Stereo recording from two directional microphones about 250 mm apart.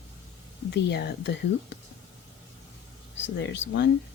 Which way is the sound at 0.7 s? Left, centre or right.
Left.